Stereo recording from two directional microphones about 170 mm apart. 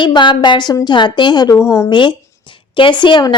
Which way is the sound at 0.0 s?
25° left (ahead or behind).